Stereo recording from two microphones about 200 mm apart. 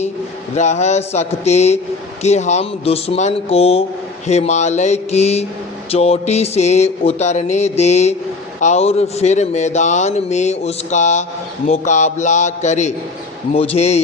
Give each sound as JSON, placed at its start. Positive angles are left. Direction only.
{"t": 0.5, "sound": "speech", "side_deg": 35}